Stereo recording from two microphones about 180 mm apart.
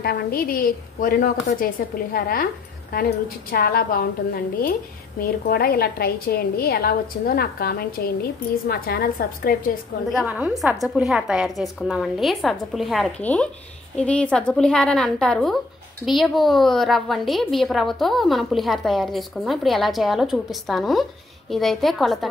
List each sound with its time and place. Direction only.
0.0 s a woman's voice: 55° left (ahead or behind)
10.1 s a woman's voice: 5° right (ahead or behind)